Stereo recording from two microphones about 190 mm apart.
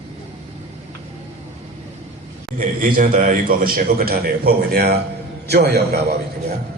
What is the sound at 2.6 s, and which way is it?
A man's voice, 45° right (ahead or behind).